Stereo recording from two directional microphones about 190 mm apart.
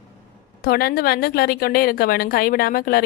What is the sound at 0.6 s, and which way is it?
A woman's voice, 55° left (ahead or behind).